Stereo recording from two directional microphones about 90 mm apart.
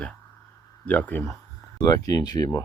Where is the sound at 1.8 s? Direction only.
45° left (ahead or behind).